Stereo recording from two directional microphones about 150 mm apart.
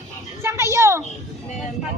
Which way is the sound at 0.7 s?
20° right (ahead or behind).